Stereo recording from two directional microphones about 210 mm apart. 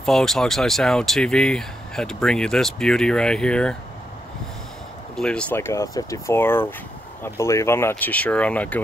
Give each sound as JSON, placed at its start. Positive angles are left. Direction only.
{"t": 0.0, "sound": "speech", "side_deg": 0}
{"t": 5.1, "sound": "speech", "side_deg": 5}